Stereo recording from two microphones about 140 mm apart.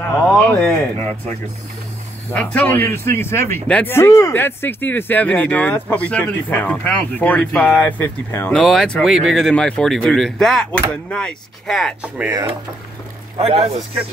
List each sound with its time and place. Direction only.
0.0 s a sound: 15° left (ahead or behind)
2.3 s speech: 10° left (ahead or behind)
8.5 s speech: 5° left (ahead or behind)
12.0 s speech: 10° right (ahead or behind)
13.4 s speech: 45° right (ahead or behind)